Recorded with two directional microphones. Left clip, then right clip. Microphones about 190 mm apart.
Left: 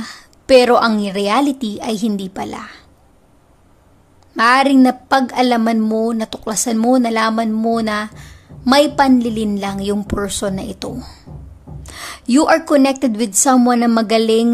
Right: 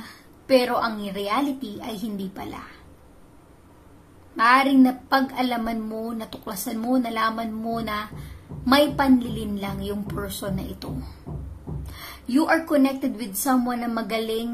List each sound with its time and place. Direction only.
0.0 s a woman's voice: 45° left (ahead or behind)
4.4 s a woman's voice: 45° left (ahead or behind)